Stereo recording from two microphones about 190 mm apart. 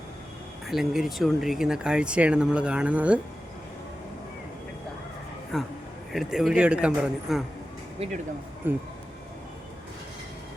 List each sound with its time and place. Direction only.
0.7 s speech: centre (ahead or behind)
5.5 s speech: centre (ahead or behind)
8.7 s speech: 10° right (ahead or behind)